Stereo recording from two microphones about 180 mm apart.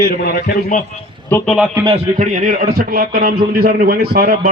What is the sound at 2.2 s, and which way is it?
A man's voice, 40° right (ahead or behind).